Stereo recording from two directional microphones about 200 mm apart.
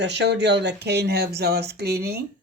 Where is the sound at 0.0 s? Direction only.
60° right (ahead or behind).